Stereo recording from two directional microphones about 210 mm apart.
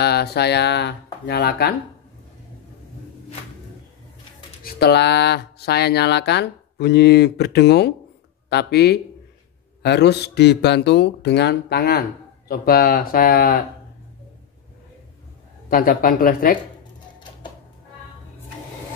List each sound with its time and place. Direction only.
0.0 s speech: 50° left (ahead or behind)
4.7 s speech: 50° left (ahead or behind)
15.7 s speech: 40° left (ahead or behind)